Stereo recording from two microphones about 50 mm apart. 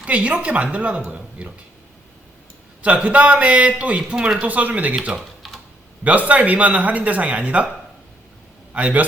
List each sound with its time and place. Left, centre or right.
0.0 s speech: right
2.8 s speech: right
5.4 s typing: centre
6.1 s speech: right
8.7 s a man's voice: right